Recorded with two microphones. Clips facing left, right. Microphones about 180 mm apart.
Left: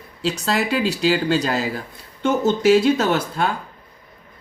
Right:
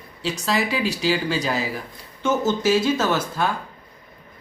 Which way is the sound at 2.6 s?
60° left (ahead or behind).